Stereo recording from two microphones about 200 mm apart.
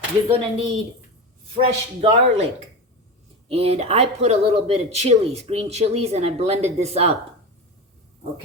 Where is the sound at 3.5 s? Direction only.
30° right (ahead or behind).